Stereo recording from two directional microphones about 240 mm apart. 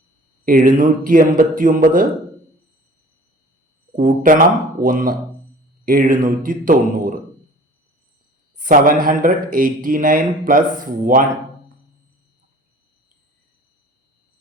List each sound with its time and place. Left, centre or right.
0.4 s speech: right
3.9 s speech: right
8.5 s speech: right